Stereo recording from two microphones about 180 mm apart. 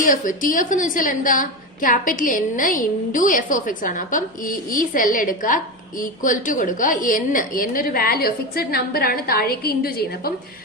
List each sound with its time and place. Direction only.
0.0 s a woman's voice: 50° left (ahead or behind)